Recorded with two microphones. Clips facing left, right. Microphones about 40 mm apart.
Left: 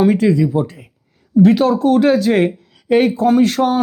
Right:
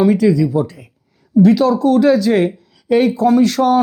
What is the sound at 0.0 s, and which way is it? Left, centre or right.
Speech, left.